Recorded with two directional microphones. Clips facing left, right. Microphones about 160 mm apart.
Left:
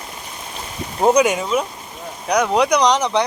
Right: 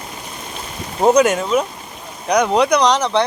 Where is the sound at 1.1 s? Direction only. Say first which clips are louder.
Right 2 dB; 5° left (ahead or behind).